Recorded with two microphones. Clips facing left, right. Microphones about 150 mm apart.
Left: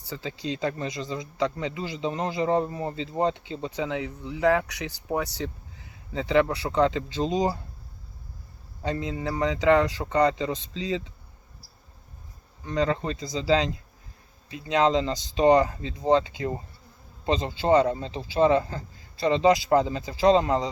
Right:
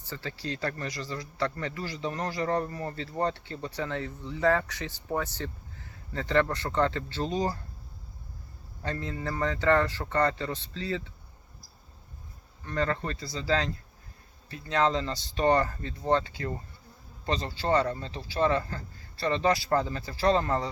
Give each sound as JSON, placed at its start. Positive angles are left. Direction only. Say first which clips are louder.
{"t": 0.0, "sound": "speech", "louder": "left 4 dB", "side_deg": 15}
{"t": 8.8, "sound": "speech", "louder": "left 5 dB", "side_deg": 15}
{"t": 12.6, "sound": "speech", "louder": "left 4 dB", "side_deg": 15}